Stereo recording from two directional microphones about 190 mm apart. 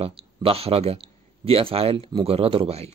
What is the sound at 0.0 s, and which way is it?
Speech, 30° right (ahead or behind).